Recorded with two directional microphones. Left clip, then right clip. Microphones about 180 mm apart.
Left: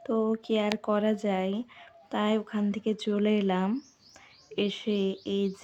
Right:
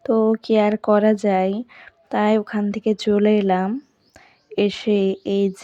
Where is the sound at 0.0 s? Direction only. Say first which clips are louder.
Right 10 dB; 35° right (ahead or behind).